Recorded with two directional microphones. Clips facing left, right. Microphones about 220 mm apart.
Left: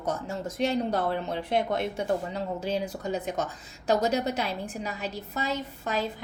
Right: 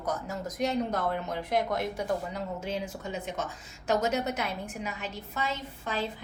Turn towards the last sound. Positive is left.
turn(degrees=40)  # may be behind; listen again after turning